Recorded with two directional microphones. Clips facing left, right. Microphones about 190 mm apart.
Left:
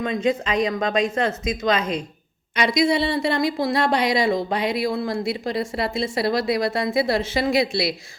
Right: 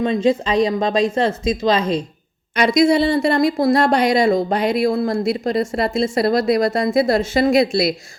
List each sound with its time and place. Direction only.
0.0 s speech: 30° right (ahead or behind)
2.6 s a woman's voice: 50° right (ahead or behind)